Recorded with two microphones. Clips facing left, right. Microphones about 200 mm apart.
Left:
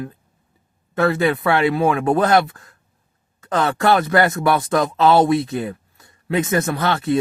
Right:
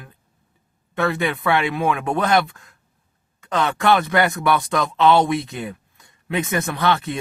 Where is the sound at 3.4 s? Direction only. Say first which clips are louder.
Left 2 dB; 35° left (ahead or behind).